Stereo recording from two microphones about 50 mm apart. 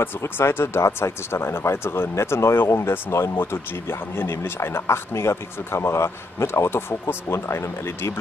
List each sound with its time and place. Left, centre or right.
0.2 s speech: left